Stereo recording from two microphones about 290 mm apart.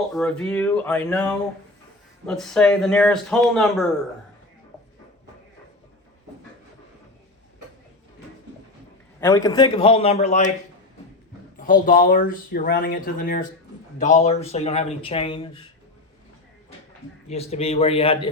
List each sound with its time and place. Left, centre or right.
0.1 s a man's voice: centre
9.2 s speech: centre
11.5 s speech: left
17.2 s speech: left